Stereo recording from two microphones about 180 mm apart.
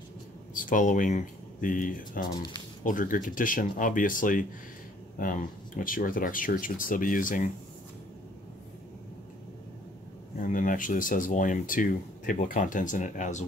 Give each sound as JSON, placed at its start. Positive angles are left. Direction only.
{"t": 0.6, "sound": "speech", "side_deg": 45}
{"t": 2.3, "sound": "speech", "side_deg": 25}
{"t": 2.8, "sound": "speech", "side_deg": 50}
{"t": 10.4, "sound": "speech", "side_deg": 50}